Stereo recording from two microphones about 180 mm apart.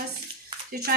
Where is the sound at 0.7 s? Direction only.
60° right (ahead or behind).